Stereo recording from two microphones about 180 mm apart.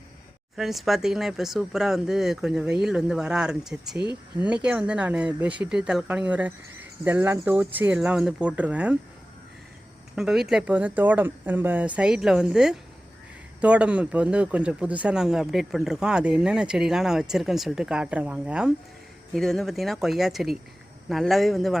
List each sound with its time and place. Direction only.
0.5 s speech: centre (ahead or behind)
4.0 s speech: 25° left (ahead or behind)
4.4 s speech: 5° right (ahead or behind)
10.2 s speech: centre (ahead or behind)